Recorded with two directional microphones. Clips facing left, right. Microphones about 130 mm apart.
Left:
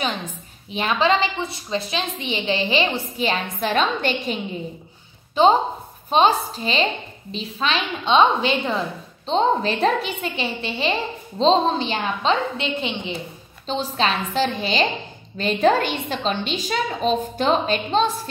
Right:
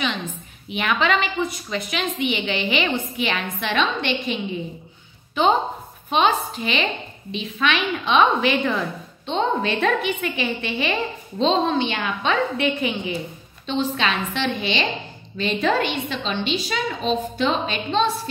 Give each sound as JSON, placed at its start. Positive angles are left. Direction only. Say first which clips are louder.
{"t": 0.7, "sound": "a woman's voice", "louder": "left 2 dB", "side_deg": 30}
{"t": 13.7, "sound": "a woman's voice", "louder": "even", "side_deg": 40}